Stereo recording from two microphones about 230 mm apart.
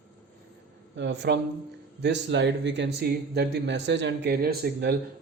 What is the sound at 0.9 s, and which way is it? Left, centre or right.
A man's voice, right.